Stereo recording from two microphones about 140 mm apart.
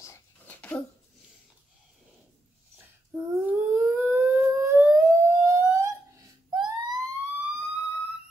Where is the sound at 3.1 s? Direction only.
10° right (ahead or behind).